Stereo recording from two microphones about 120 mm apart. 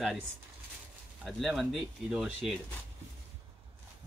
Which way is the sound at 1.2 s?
Centre (ahead or behind).